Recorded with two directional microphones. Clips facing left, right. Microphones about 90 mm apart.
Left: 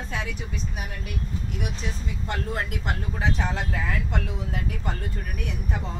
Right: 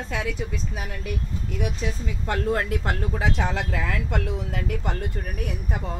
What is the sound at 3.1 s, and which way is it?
Speech, 90° right.